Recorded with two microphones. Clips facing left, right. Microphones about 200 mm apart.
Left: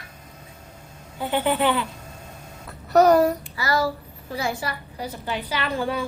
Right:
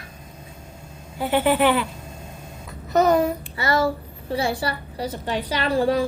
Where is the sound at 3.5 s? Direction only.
25° right (ahead or behind).